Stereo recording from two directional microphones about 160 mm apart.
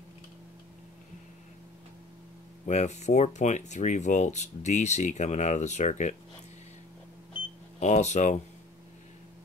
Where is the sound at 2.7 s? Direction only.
45° left (ahead or behind).